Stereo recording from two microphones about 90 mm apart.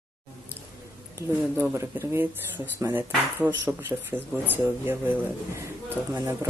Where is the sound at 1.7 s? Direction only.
35° right (ahead or behind).